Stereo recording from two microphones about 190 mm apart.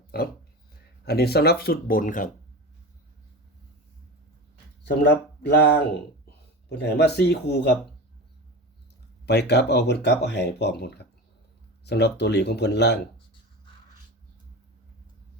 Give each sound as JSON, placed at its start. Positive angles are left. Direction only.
{"t": 1.0, "sound": "speech", "side_deg": 55}
{"t": 5.0, "sound": "speech", "side_deg": 60}
{"t": 9.2, "sound": "speech", "side_deg": 60}